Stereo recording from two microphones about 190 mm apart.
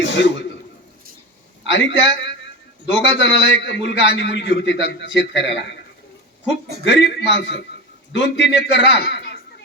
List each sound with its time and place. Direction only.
0.0 s a man's voice: 70° left (ahead or behind)
1.6 s a man's voice: 70° left (ahead or behind)
6.8 s a man's voice: 70° left (ahead or behind)